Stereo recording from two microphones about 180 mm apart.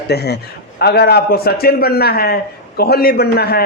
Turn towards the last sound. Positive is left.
turn(degrees=60)  # may be behind; listen again after turning